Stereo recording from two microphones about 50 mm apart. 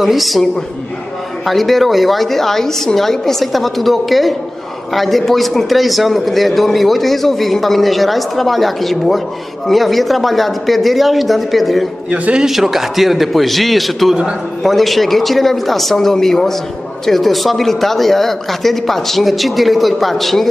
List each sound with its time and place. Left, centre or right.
0.0 s a man's voice: centre
12.1 s a man's voice: right
12.4 s a man's voice: centre